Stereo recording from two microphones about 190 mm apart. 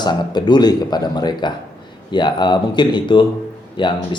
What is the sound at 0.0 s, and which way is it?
Speech, 20° left (ahead or behind).